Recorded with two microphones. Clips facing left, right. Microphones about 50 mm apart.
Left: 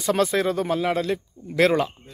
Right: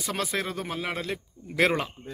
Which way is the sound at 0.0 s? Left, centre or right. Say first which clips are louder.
Left 9 dB; centre.